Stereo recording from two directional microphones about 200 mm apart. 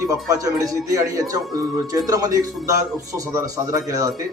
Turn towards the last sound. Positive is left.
turn(degrees=-15)  # may be behind; listen again after turning